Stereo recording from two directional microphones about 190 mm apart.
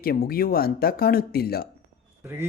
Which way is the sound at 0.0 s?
50° left (ahead or behind).